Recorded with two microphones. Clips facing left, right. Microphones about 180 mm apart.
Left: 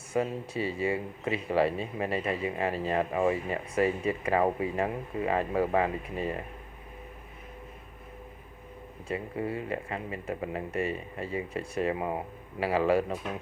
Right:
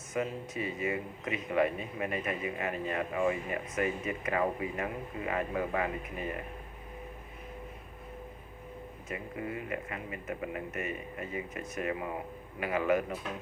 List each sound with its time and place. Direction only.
0.1 s speech: 30° left (ahead or behind)
9.0 s speech: 30° left (ahead or behind)